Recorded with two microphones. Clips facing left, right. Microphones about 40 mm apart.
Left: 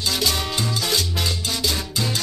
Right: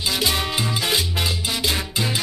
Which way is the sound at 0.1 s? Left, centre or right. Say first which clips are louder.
Right 2 dB; centre.